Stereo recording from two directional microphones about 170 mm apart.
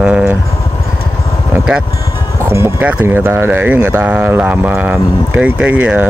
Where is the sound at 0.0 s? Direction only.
5° right (ahead or behind).